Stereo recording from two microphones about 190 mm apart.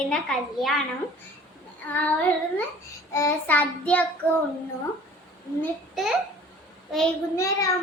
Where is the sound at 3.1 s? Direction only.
10° left (ahead or behind).